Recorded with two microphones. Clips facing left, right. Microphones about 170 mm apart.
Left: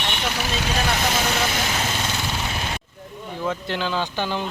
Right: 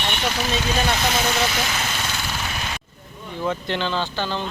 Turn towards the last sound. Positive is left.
turn(degrees=5)  # may be behind; listen again after turning